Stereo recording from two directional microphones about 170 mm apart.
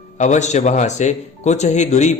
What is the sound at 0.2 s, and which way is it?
Speech, 45° left (ahead or behind).